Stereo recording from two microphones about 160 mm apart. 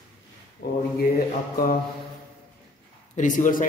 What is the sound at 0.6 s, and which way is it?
Speech, 90° left.